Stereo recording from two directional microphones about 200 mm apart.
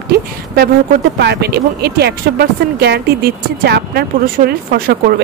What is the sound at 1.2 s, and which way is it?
Speech, 55° right (ahead or behind).